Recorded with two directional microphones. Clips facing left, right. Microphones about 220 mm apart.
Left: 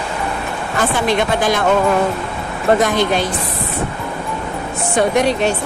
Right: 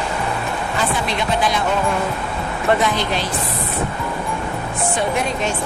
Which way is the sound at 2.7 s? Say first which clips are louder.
Left 5 dB; 45° left (ahead or behind).